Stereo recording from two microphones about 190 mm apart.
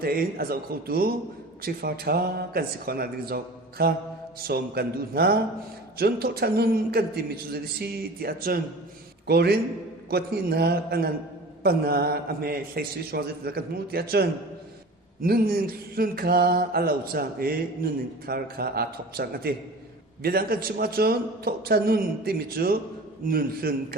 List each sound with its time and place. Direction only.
0.0 s mantra: 50° right (ahead or behind)
6.0 s a man's voice: 55° right (ahead or behind)
15.2 s mantra: 50° right (ahead or behind)